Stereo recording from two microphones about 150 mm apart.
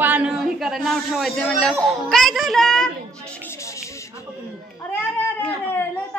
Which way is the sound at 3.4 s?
20° left (ahead or behind).